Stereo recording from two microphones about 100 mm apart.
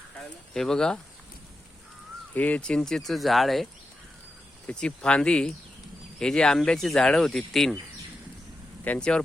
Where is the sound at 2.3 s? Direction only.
15° left (ahead or behind).